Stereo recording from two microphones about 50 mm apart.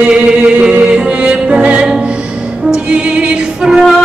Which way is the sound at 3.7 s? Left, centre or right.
Centre.